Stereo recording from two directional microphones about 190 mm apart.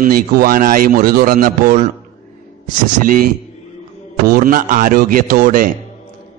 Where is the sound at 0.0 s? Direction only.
50° right (ahead or behind).